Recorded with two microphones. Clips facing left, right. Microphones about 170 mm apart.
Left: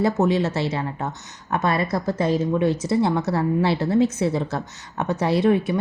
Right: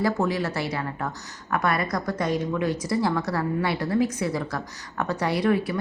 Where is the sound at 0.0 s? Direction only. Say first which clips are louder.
Left 4 dB; 25° left (ahead or behind).